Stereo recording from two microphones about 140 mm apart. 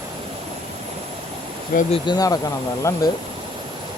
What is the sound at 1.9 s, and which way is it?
Speech, 30° left (ahead or behind).